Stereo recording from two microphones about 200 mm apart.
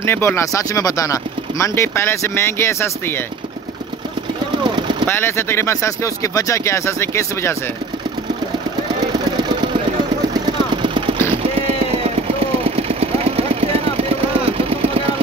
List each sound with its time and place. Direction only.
0.0 s speech: 10° left (ahead or behind)
5.0 s speech: 10° left (ahead or behind)
10.8 s vehicle: 25° right (ahead or behind)
12.4 s vehicle: 30° right (ahead or behind)